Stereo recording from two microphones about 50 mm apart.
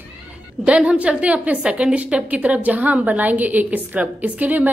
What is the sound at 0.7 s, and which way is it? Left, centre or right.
A woman's voice, right.